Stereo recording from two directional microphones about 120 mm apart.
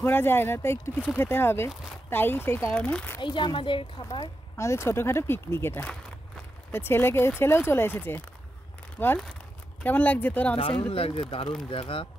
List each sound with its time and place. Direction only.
0.0 s speech: 20° left (ahead or behind)
3.2 s speech: 40° left (ahead or behind)
4.6 s speech: 25° left (ahead or behind)
10.9 s speech: 50° left (ahead or behind)